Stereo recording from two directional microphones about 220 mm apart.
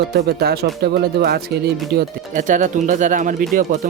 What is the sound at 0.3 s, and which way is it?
Speech, 45° right (ahead or behind).